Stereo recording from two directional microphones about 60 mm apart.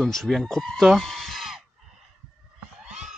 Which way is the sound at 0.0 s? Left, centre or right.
Centre.